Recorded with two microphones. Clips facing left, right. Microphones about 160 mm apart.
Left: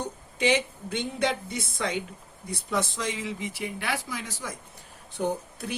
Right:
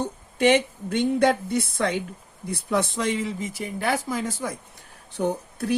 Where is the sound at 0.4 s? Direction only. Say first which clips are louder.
Right 6 dB; 55° right (ahead or behind).